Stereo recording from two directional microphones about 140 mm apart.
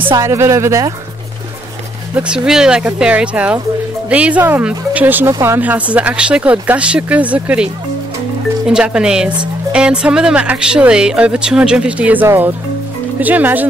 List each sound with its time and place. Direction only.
0.1 s speech: 20° right (ahead or behind)
2.1 s speech: 5° right (ahead or behind)